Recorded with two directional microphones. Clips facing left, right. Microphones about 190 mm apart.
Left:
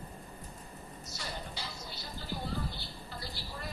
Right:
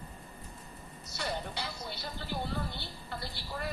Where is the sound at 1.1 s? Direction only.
60° right (ahead or behind).